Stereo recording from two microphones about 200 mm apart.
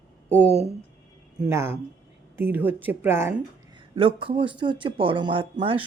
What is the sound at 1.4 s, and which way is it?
Speech, 10° right (ahead or behind).